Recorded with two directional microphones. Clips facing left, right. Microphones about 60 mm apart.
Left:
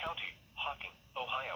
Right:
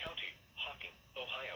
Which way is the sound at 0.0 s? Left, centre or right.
Left.